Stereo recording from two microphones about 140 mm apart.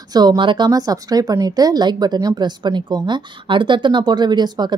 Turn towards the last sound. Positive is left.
turn(degrees=-30)  # may be behind; listen again after turning